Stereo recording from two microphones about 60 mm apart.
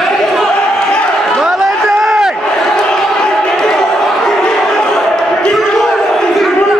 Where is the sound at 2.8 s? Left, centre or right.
Centre.